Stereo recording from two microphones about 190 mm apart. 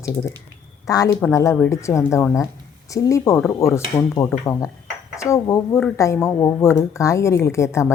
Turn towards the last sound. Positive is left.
turn(degrees=15)  # may be behind; listen again after turning